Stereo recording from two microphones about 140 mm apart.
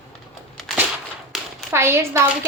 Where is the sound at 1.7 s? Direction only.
15° right (ahead or behind).